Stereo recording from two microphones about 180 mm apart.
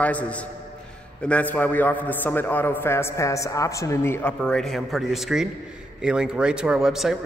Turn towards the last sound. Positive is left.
turn(degrees=0)  # may be behind; listen again after turning